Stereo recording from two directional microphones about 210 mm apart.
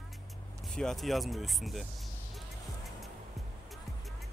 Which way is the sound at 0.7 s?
Centre (ahead or behind).